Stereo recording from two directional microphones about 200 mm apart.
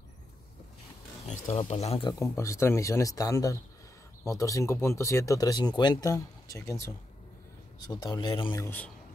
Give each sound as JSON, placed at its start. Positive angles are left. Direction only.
{"t": 1.2, "sound": "speech", "side_deg": 35}
{"t": 7.8, "sound": "speech", "side_deg": 20}
{"t": 8.6, "sound": "speech", "side_deg": 10}